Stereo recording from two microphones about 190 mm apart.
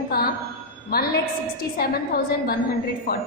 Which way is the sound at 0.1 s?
55° left (ahead or behind).